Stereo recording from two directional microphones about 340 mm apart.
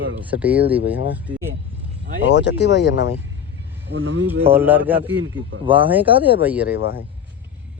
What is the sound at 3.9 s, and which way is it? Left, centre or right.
Speech, right.